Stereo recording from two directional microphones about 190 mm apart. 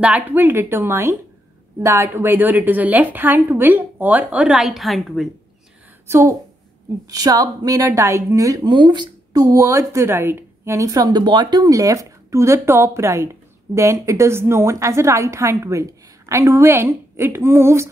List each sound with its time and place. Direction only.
0.0 s a woman's voice: 10° right (ahead or behind)
6.0 s a woman's voice: 15° right (ahead or behind)